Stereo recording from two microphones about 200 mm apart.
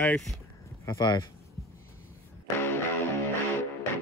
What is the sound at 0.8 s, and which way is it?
Speech, 20° left (ahead or behind).